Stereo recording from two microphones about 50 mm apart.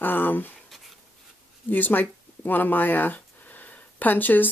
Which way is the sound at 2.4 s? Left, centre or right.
Left.